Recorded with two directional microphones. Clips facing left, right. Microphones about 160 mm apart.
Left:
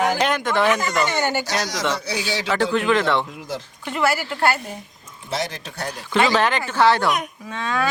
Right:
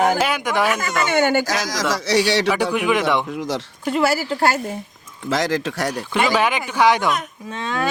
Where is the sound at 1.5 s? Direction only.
90° right; by 2.4 s 75° right (ahead or behind).